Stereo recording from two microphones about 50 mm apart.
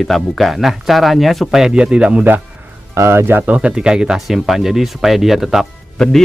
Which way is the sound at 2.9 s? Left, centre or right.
Right.